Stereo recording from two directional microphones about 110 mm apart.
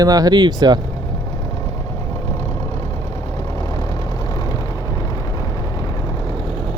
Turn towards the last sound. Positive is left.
turn(degrees=0)  # may be behind; listen again after turning